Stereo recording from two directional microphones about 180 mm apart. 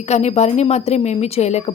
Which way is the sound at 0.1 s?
35° left (ahead or behind).